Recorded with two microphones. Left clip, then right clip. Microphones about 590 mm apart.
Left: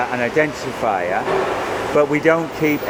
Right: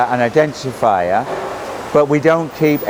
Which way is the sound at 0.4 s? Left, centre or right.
Right.